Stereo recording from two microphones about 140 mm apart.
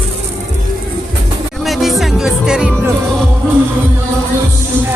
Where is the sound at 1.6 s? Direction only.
Centre (ahead or behind).